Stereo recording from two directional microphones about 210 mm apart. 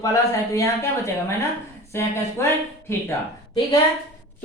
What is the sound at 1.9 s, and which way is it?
Speech, 10° left (ahead or behind).